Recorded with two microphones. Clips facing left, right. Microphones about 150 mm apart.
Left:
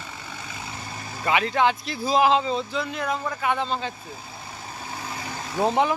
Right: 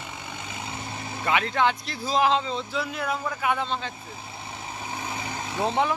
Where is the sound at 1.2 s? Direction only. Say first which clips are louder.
Left 2 dB; 5° left (ahead or behind).